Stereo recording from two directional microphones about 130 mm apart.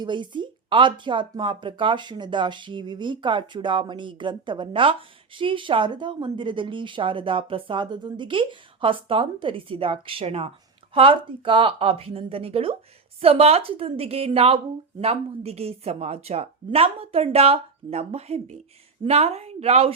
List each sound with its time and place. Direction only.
0.0 s speech: 35° right (ahead or behind); by 19.9 s 50° right (ahead or behind)